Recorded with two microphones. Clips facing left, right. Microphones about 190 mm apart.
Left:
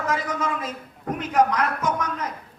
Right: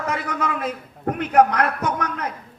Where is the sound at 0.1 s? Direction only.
60° right (ahead or behind).